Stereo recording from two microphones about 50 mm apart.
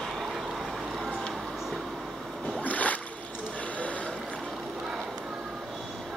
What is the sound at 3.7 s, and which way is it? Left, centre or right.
Boat, left.